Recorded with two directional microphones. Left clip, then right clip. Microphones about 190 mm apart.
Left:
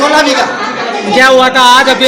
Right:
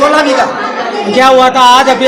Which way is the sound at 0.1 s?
Centre (ahead or behind).